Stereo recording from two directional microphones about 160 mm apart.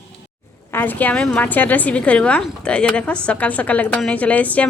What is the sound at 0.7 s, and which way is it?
A woman's voice, 10° left (ahead or behind).